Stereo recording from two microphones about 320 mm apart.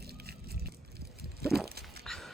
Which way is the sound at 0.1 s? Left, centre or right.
Right.